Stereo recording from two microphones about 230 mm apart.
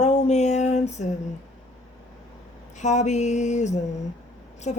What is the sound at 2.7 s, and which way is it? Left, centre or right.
A woman's voice, left.